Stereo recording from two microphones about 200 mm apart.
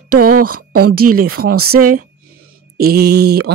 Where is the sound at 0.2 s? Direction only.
45° right (ahead or behind).